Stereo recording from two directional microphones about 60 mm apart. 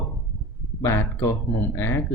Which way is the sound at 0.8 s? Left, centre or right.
Left.